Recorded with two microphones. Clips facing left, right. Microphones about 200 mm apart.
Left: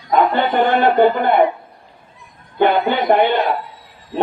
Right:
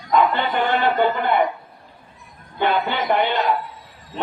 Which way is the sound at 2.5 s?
50° left (ahead or behind).